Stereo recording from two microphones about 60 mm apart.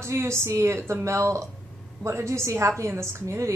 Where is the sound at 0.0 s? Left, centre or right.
Right.